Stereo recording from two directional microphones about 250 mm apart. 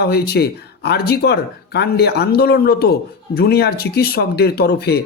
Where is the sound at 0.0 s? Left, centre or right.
Left.